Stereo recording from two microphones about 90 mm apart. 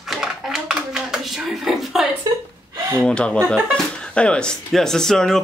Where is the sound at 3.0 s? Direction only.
10° left (ahead or behind).